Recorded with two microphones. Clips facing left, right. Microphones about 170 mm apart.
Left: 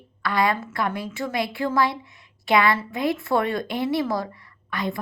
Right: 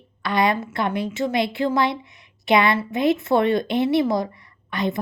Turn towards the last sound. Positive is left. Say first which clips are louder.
# right 4 dB
turn(degrees=-20)  # may be behind; listen again after turning